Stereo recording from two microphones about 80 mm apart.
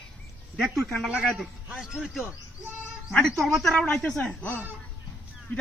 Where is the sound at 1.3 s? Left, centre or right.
Centre.